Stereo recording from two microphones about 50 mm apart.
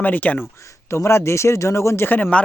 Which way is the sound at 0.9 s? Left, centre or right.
Left.